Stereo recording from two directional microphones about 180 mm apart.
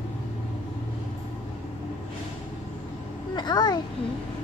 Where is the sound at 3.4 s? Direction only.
25° left (ahead or behind).